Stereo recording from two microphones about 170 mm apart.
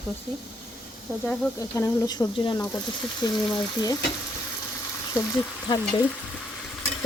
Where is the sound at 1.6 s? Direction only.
20° left (ahead or behind).